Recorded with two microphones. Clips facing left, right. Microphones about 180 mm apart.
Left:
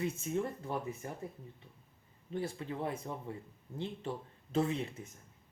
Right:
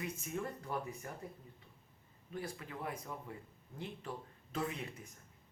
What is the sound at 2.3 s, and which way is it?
Speech, 25° left (ahead or behind).